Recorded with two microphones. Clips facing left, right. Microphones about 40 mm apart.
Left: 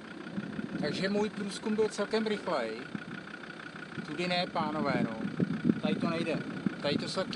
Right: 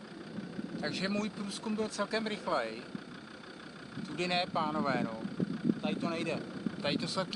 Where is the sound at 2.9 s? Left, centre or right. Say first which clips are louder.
Left 4 dB; left.